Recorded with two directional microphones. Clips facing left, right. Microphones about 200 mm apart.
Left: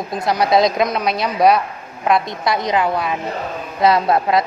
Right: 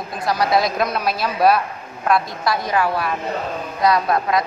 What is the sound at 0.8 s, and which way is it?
Speech, 5° right (ahead or behind).